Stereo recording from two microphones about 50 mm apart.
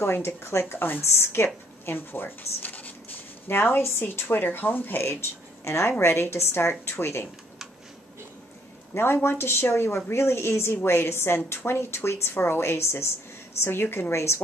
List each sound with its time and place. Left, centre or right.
0.0 s speech: left
8.9 s a woman's voice: left